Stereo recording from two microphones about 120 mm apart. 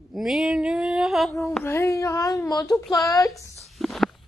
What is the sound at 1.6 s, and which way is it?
Speech, 25° left (ahead or behind).